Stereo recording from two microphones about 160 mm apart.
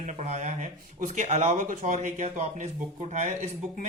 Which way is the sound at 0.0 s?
50° right (ahead or behind).